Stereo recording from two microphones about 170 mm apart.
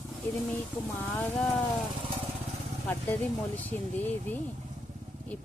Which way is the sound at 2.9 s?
10° left (ahead or behind).